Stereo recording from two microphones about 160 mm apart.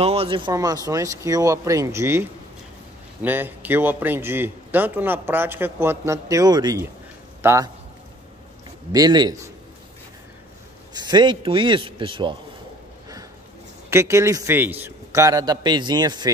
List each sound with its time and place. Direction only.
0.0 s a man's voice: 35° right (ahead or behind); by 7.7 s 20° right (ahead or behind)
8.9 s a man's voice: 25° right (ahead or behind)
10.9 s a man's voice: 25° right (ahead or behind)
13.8 s a man's voice: 15° right (ahead or behind)